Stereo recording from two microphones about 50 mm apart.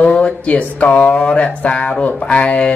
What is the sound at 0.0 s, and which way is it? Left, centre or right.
Mantra, left.